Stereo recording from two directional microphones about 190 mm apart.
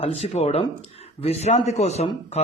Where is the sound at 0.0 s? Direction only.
35° left (ahead or behind).